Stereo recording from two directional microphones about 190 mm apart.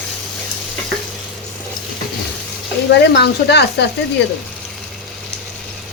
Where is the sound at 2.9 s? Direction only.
60° left (ahead or behind).